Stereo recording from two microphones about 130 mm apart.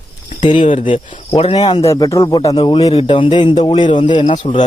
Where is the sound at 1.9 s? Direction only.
25° left (ahead or behind).